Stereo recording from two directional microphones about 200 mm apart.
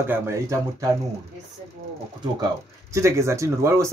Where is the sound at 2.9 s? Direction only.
15° right (ahead or behind).